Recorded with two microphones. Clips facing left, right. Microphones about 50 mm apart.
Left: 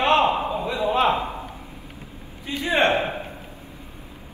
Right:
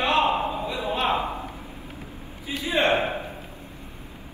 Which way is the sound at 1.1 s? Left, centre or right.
Right.